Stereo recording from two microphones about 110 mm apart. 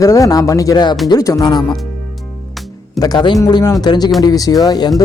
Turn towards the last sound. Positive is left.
turn(degrees=35)  # may be behind; listen again after turning